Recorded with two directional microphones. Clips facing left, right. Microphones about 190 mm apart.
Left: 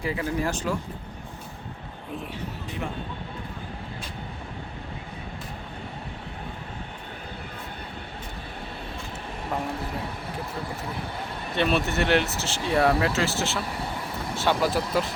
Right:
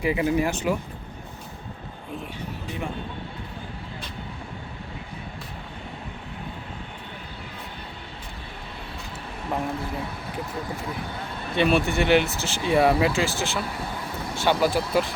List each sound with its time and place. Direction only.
0.0 s speech: 15° right (ahead or behind)
11.5 s speech: centre (ahead or behind)